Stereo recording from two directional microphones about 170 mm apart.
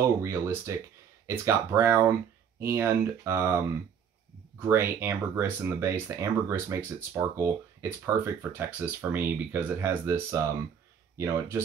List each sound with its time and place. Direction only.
0.2 s speech: 15° right (ahead or behind)